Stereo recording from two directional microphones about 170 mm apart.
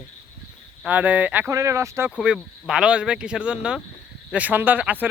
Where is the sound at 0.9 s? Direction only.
10° right (ahead or behind).